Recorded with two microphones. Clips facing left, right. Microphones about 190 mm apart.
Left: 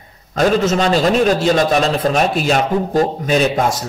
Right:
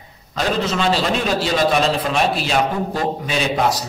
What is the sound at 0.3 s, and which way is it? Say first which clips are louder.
A man's voice: left 6 dB; 45° left (ahead or behind).